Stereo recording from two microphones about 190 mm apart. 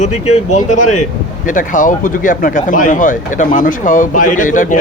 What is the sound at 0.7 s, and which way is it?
Speech, 40° left (ahead or behind).